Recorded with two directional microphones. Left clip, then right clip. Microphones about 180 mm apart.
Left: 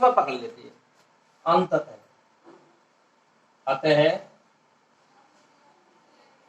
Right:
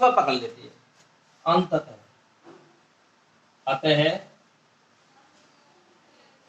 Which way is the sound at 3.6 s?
15° right (ahead or behind).